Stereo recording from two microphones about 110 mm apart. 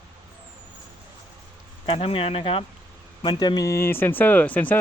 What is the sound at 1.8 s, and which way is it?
Speech, 55° left (ahead or behind).